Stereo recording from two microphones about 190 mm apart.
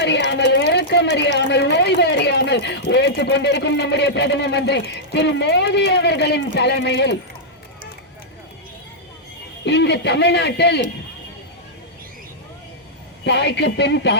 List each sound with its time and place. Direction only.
0.3 s a woman's voice: 65° left (ahead or behind)
9.6 s a woman's voice: 65° left (ahead or behind)
13.2 s a woman's voice: 65° left (ahead or behind)